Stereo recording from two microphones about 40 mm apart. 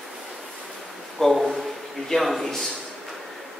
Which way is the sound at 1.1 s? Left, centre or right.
Centre.